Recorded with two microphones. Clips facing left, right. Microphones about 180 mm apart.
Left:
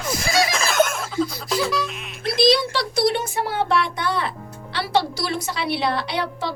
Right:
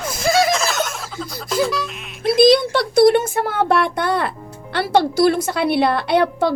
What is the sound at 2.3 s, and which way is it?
A woman's voice, 50° right (ahead or behind).